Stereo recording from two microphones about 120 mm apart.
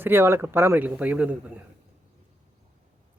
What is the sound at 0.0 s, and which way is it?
A man's voice, 20° right (ahead or behind).